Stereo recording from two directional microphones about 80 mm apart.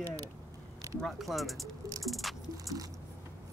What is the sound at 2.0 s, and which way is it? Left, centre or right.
Patter, centre.